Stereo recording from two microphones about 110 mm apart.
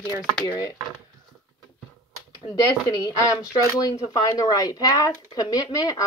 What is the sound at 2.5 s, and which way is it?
Speech, 35° left (ahead or behind).